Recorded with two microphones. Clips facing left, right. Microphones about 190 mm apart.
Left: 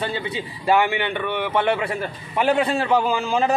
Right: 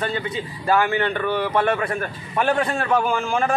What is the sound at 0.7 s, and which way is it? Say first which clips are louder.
A man's voice: even; 20° left (ahead or behind).